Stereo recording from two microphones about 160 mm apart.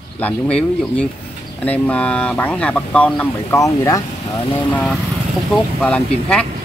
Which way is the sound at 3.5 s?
20° left (ahead or behind).